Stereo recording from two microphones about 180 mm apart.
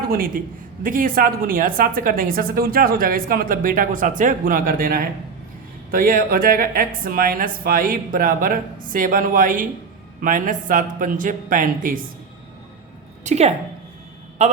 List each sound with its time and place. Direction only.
0.1 s a woman's voice: 50° right (ahead or behind)
13.2 s a woman's voice: 40° right (ahead or behind)